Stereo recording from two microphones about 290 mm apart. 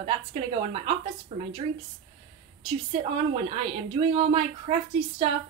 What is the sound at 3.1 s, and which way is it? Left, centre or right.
A woman's voice, centre.